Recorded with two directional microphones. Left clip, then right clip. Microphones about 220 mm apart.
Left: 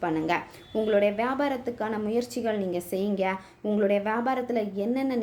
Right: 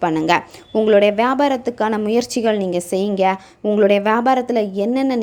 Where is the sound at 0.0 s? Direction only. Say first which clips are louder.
Right 10 dB; 35° right (ahead or behind).